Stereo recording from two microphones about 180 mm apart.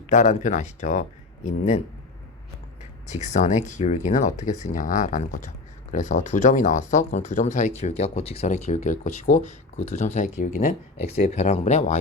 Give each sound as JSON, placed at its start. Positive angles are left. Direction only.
{"t": 0.1, "sound": "speech", "side_deg": 45}
{"t": 3.1, "sound": "speech", "side_deg": 40}